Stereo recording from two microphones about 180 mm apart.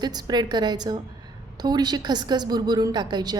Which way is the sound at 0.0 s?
20° right (ahead or behind).